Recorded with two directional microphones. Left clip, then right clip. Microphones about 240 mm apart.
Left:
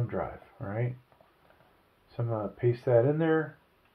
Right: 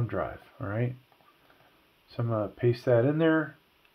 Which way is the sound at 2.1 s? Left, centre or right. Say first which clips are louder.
Right 3 dB; right.